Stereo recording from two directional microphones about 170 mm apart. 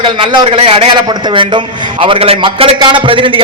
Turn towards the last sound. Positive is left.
turn(degrees=-30)  # may be behind; listen again after turning